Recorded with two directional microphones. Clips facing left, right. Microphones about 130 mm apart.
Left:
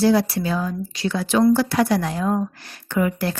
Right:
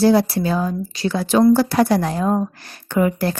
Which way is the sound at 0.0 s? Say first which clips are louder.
Right 3 dB; 35° right (ahead or behind).